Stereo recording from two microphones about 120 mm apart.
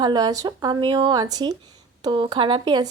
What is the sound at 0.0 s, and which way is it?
A woman's voice, 35° right (ahead or behind).